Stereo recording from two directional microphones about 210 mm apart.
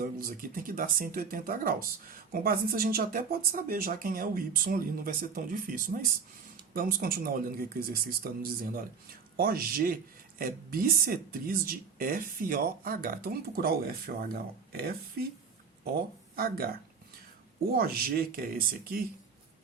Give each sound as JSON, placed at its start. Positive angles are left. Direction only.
{"t": 0.2, "sound": "speech", "side_deg": -45}
{"t": 16.3, "sound": "speech", "side_deg": -45}
{"t": 17.7, "sound": "speech", "side_deg": -45}